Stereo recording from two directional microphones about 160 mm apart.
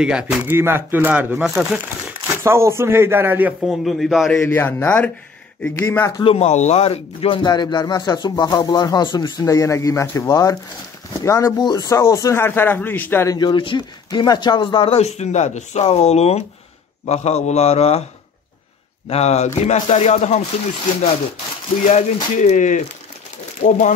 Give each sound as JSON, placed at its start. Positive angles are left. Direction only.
{"t": 0.0, "sound": "speech", "side_deg": -5}
{"t": 2.2, "sound": "speech", "side_deg": -15}
{"t": 3.8, "sound": "a man's voice", "side_deg": 0}
{"t": 4.4, "sound": "speech", "side_deg": 15}
{"t": 6.2, "sound": "a man's voice", "side_deg": 40}
{"t": 13.4, "sound": "speech", "side_deg": 30}
{"t": 19.0, "sound": "speech", "side_deg": 40}
{"t": 21.9, "sound": "speech", "side_deg": 50}